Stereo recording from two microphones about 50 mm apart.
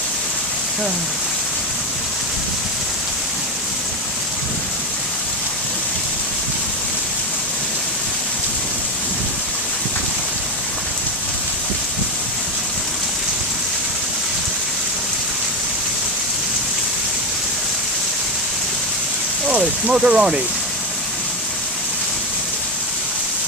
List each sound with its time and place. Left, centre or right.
19.9 s speech: centre